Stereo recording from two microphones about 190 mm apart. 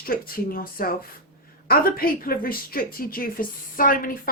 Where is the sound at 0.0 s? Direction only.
50° left (ahead or behind).